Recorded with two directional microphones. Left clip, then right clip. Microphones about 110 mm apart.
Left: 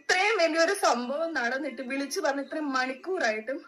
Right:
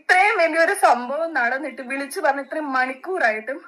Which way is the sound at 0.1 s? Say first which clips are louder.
Right 8 dB; 30° right (ahead or behind).